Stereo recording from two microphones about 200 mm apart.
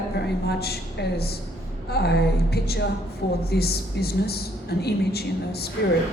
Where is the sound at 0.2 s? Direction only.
55° left (ahead or behind).